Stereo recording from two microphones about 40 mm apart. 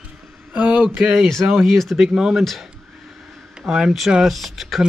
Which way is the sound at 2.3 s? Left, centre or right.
Centre.